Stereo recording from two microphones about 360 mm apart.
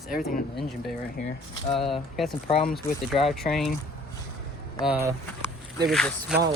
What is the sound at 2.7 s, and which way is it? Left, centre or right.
Speech, centre.